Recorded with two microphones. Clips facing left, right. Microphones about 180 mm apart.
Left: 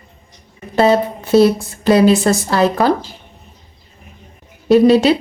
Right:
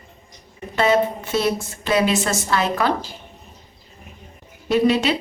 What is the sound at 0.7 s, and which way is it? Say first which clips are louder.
Speech: left 5 dB; 35° left (ahead or behind).